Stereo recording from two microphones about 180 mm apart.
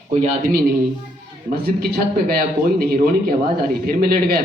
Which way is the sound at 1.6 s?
55° right (ahead or behind).